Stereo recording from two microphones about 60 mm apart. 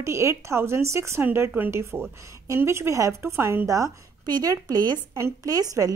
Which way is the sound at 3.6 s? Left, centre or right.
Right.